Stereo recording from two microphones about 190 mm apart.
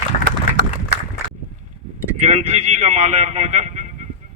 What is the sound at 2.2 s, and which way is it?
Speech, 35° right (ahead or behind).